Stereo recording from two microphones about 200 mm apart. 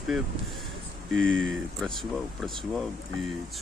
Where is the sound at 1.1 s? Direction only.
75° right (ahead or behind).